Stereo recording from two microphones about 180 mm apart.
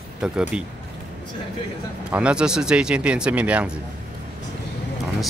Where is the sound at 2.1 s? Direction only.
5° right (ahead or behind).